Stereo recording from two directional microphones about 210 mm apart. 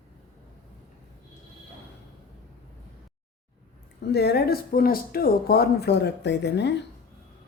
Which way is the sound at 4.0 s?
50° left (ahead or behind).